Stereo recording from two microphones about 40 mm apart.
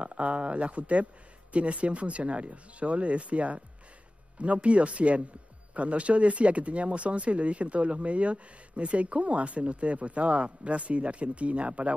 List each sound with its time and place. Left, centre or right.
0.0 s speech: right